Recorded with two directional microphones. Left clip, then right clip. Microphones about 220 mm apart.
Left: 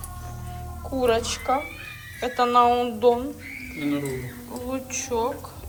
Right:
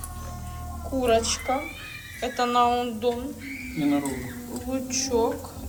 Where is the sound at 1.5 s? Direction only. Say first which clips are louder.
Left 3 dB; 5° right (ahead or behind).